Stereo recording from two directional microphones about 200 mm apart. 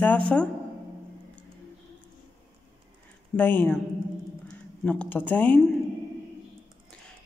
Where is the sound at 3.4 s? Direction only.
10° left (ahead or behind).